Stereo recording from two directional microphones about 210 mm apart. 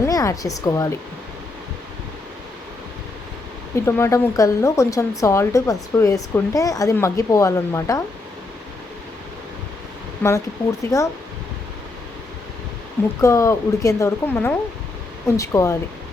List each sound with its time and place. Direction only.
0.0 s speech: 15° left (ahead or behind)
3.8 s speech: 10° left (ahead or behind)
10.2 s speech: 10° left (ahead or behind)
13.2 s speech: 15° left (ahead or behind)